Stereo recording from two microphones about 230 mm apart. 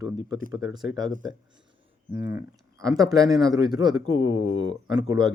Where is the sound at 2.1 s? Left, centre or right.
Centre.